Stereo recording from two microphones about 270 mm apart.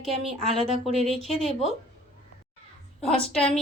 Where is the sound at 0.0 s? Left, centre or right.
Centre.